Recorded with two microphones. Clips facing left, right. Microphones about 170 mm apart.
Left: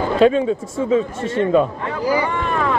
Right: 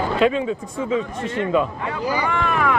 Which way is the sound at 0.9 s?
35° left (ahead or behind).